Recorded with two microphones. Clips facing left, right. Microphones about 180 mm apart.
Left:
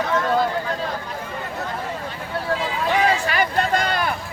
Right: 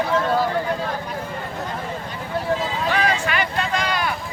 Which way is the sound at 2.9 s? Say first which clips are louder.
Left 3 dB; 20° left (ahead or behind).